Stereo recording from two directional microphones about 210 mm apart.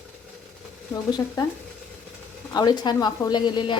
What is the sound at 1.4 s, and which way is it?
A woman's voice, 20° left (ahead or behind).